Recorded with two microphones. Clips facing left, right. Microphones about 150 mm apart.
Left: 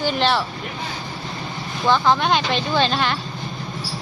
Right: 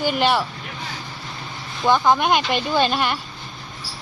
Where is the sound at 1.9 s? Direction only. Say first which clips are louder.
Right 1 dB; 10° right (ahead or behind).